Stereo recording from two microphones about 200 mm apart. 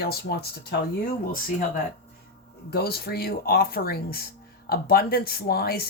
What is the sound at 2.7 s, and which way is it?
Speech, 50° left (ahead or behind).